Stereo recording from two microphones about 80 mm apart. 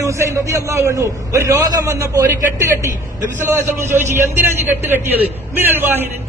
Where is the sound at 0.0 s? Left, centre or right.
Right.